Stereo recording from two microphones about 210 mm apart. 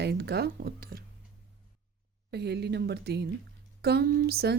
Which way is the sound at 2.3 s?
50° right (ahead or behind).